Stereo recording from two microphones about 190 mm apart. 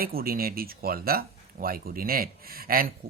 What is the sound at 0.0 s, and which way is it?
Speech, 50° right (ahead or behind).